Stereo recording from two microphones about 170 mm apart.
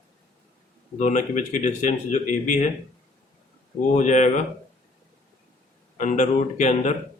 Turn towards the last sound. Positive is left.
turn(degrees=45)  # may be behind; listen again after turning